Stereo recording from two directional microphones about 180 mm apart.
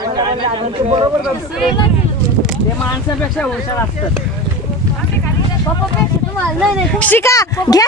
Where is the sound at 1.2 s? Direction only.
5° right (ahead or behind).